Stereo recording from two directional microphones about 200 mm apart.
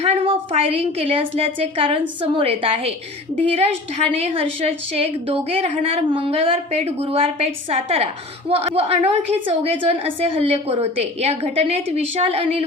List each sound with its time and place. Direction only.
0.0 s a woman's voice: 30° right (ahead or behind)